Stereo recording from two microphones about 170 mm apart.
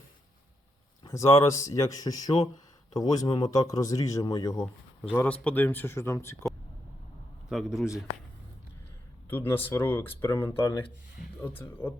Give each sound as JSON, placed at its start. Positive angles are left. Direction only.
{"t": 1.1, "sound": "speech", "side_deg": 20}
{"t": 5.1, "sound": "a man's voice", "side_deg": 10}
{"t": 7.5, "sound": "a man's voice", "side_deg": 0}
{"t": 9.3, "sound": "a man's voice", "side_deg": 10}